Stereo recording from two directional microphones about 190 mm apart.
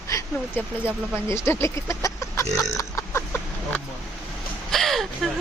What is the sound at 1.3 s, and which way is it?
Speech, 15° left (ahead or behind).